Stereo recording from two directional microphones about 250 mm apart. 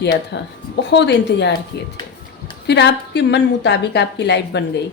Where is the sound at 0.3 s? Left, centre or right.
Left.